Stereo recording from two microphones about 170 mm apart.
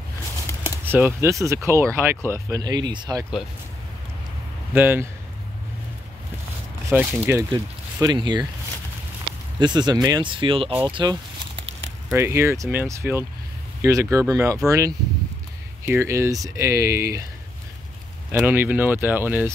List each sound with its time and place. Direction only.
0.7 s speech: 15° right (ahead or behind)
4.7 s speech: 10° right (ahead or behind)
6.9 s speech: 10° right (ahead or behind)
9.6 s speech: 25° right (ahead or behind)
12.1 s speech: 15° right (ahead or behind)
18.4 s speech: 10° right (ahead or behind)